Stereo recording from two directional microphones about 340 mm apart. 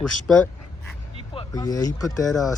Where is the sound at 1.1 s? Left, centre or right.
Centre.